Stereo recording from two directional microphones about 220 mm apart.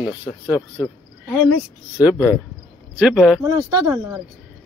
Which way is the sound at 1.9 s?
15° left (ahead or behind).